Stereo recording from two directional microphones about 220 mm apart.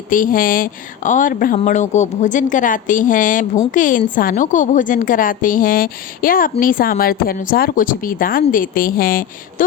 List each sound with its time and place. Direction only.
0.1 s a woman's voice: 40° left (ahead or behind)